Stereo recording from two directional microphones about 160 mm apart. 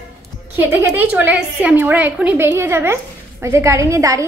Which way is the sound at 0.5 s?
15° right (ahead or behind).